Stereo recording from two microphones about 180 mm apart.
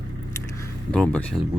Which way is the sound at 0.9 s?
5° left (ahead or behind).